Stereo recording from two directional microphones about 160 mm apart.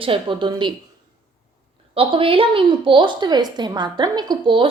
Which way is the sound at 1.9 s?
35° right (ahead or behind).